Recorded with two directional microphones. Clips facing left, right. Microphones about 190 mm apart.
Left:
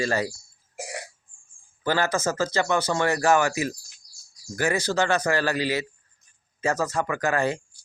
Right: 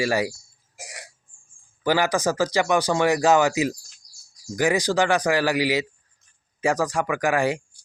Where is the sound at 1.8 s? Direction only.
15° right (ahead or behind).